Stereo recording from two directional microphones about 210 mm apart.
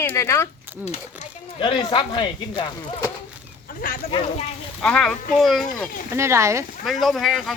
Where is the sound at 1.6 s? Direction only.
25° left (ahead or behind).